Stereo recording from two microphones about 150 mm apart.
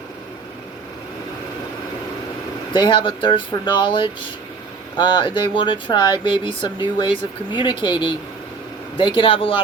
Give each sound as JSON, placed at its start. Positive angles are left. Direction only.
{"t": 2.7, "sound": "speech", "side_deg": 35}